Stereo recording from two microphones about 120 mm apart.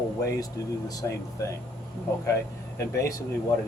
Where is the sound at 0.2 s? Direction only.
25° left (ahead or behind).